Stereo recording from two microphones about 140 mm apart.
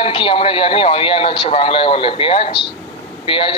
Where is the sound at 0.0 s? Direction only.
40° left (ahead or behind).